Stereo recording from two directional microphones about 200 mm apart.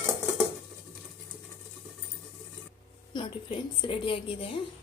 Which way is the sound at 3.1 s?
25° left (ahead or behind).